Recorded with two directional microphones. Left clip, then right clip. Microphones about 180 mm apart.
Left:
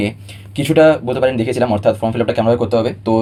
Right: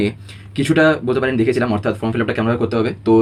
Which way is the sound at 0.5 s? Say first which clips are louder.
Left 4 dB; 20° left (ahead or behind).